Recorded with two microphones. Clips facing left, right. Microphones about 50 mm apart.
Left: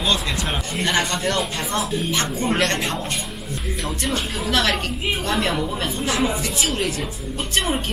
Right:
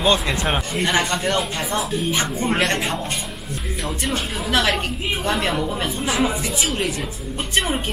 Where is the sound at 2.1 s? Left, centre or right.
Centre.